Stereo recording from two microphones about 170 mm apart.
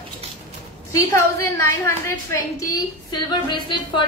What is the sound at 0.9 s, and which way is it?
A woman's voice, 20° left (ahead or behind).